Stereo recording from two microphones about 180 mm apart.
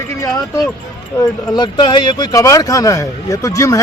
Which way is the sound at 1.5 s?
25° left (ahead or behind).